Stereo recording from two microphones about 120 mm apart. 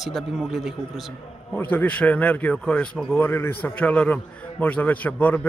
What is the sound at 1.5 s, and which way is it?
A man's voice, 15° left (ahead or behind).